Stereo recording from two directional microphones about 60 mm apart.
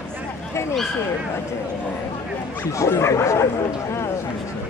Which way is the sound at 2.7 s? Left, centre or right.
Left.